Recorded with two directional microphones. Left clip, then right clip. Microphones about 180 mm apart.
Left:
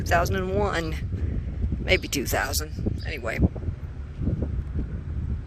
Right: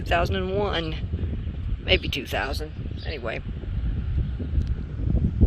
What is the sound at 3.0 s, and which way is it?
Speech, 30° left (ahead or behind).